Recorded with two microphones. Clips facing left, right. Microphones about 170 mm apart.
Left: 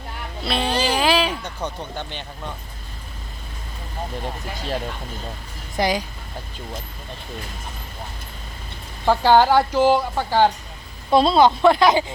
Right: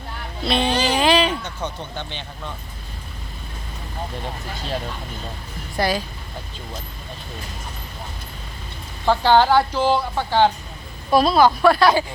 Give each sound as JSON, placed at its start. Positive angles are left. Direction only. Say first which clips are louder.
{"t": 0.4, "sound": "speech", "louder": "right 2 dB", "side_deg": 5}
{"t": 5.7, "sound": "a woman's voice", "louder": "even", "side_deg": 20}
{"t": 9.0, "sound": "a woman's voice", "louder": "left 1 dB", "side_deg": 10}
{"t": 11.1, "sound": "speech", "louder": "even", "side_deg": 25}